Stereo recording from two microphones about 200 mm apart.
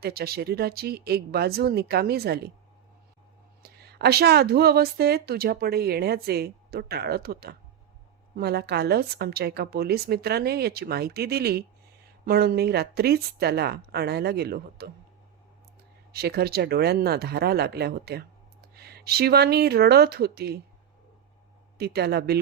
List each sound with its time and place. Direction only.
0.0 s a woman's voice: 50° right (ahead or behind)
3.6 s a woman's voice: 55° right (ahead or behind)
16.1 s a woman's voice: 50° right (ahead or behind)
21.8 s a woman's voice: 55° right (ahead or behind)